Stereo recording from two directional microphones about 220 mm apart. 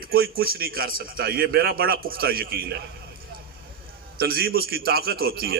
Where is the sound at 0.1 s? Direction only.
45° right (ahead or behind).